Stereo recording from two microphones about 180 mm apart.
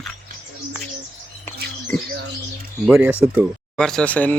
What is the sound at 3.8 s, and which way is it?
Speech, 5° left (ahead or behind).